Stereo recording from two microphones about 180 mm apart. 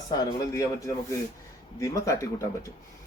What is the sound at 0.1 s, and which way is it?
A man's voice, 20° left (ahead or behind).